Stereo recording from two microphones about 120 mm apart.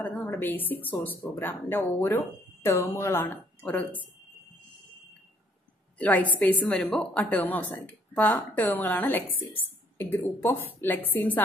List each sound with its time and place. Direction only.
0.0 s speech: 15° left (ahead or behind)
5.9 s a woman's voice: 15° left (ahead or behind)